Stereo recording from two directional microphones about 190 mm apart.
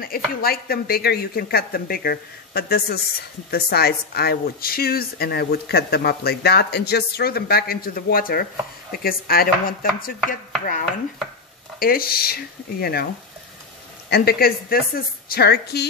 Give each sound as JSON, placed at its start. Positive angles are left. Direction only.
{"t": 0.0, "sound": "a woman's voice", "side_deg": 50}
{"t": 11.8, "sound": "speech", "side_deg": 50}
{"t": 14.1, "sound": "a woman's voice", "side_deg": 50}